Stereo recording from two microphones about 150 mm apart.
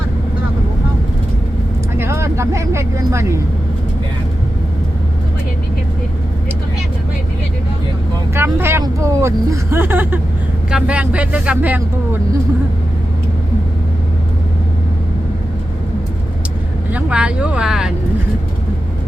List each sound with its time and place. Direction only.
2.0 s speech: 20° right (ahead or behind)
8.4 s speech: 15° right (ahead or behind)
16.9 s speech: 5° right (ahead or behind)